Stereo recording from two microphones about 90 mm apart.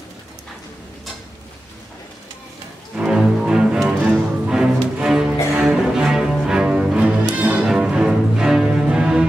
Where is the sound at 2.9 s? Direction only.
10° right (ahead or behind).